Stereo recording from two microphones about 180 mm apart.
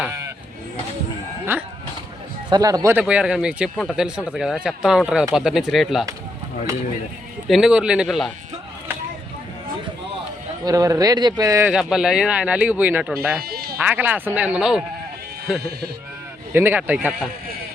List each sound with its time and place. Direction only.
1.5 s speech: 10° right (ahead or behind)
3.0 s speech: 5° right (ahead or behind)
7.4 s speech: centre (ahead or behind)
10.6 s speech: 20° right (ahead or behind)
11.7 s speech: 5° right (ahead or behind)
13.4 s bleat: 55° right (ahead or behind)
13.7 s speech: 10° right (ahead or behind)
16.5 s speech: 10° right (ahead or behind)